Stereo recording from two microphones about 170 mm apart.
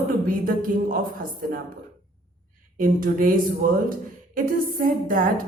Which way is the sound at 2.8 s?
55° right (ahead or behind).